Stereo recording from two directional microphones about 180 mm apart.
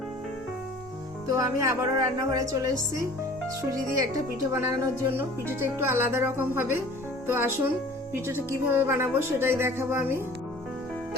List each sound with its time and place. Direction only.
1.3 s a woman's voice: 20° right (ahead or behind)